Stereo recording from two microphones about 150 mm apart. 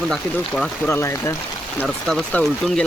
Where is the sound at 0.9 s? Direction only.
15° left (ahead or behind).